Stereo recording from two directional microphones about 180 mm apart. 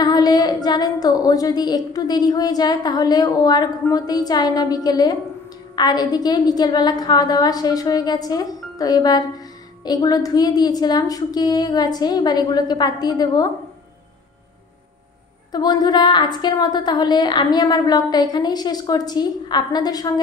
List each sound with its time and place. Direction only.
0.0 s female singing: 20° left (ahead or behind)
15.5 s female singing: 20° left (ahead or behind)